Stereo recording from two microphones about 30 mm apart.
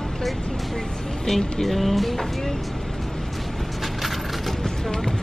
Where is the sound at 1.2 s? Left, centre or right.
Centre.